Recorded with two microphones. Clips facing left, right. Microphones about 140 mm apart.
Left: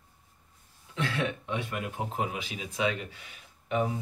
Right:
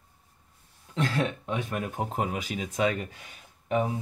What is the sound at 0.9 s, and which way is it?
Speech, 40° right (ahead or behind).